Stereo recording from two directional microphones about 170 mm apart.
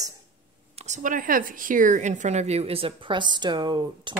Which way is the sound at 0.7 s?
45° right (ahead or behind).